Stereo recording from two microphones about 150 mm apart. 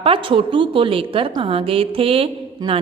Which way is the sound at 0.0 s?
35° right (ahead or behind).